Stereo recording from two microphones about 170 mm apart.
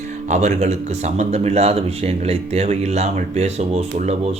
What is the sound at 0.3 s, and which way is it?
A man's voice, 40° right (ahead or behind).